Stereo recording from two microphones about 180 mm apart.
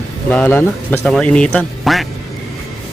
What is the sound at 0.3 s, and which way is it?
Speech, 10° left (ahead or behind).